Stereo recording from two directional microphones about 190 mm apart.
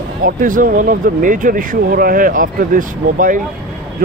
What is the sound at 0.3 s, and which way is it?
Speech, 45° right (ahead or behind).